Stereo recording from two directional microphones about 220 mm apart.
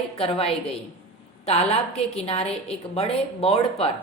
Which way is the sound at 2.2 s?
25° left (ahead or behind).